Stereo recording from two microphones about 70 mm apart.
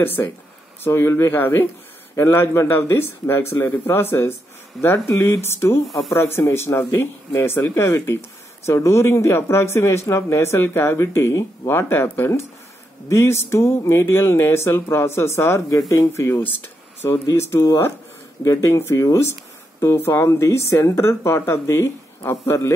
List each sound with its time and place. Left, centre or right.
0.0 s speech: left
1.3 s speech: left